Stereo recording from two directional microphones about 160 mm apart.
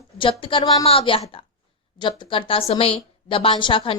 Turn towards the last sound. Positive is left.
turn(degrees=35)  # may be behind; listen again after turning